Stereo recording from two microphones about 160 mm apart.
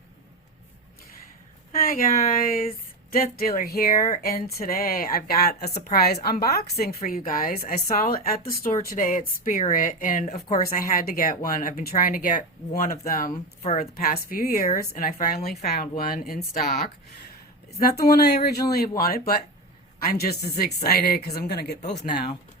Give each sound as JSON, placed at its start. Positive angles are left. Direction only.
{"t": 1.7, "sound": "speech", "side_deg": 65}
{"t": 7.0, "sound": "speech", "side_deg": 60}
{"t": 10.7, "sound": "speech", "side_deg": 65}
{"t": 17.7, "sound": "speech", "side_deg": 70}
{"t": 21.8, "sound": "speech", "side_deg": 50}